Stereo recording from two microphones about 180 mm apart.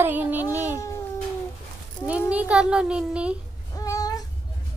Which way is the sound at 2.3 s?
5° right (ahead or behind).